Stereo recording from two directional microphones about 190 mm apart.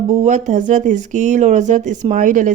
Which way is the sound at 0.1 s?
40° right (ahead or behind).